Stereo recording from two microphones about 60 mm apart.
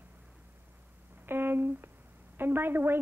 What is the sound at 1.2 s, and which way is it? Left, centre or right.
Speech, right.